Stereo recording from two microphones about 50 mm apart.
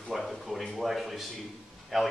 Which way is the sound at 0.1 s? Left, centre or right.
Centre.